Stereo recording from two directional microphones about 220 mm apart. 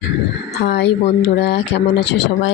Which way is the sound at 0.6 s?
50° left (ahead or behind).